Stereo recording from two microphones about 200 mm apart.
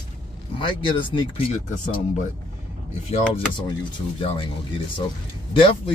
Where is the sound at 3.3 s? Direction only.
30° left (ahead or behind).